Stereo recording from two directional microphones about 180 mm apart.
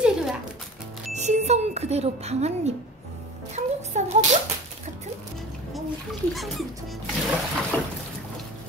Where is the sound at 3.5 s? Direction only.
40° right (ahead or behind).